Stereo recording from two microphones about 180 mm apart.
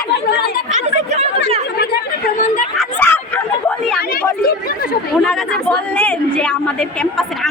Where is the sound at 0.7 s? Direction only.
40° right (ahead or behind).